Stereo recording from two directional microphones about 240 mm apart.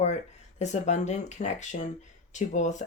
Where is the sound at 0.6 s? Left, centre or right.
Left.